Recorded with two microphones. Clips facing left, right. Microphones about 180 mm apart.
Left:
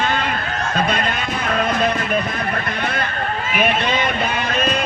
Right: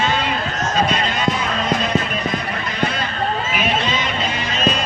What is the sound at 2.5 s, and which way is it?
Run, 55° left (ahead or behind).